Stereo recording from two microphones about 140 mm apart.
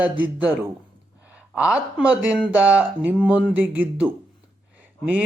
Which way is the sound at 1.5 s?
10° right (ahead or behind).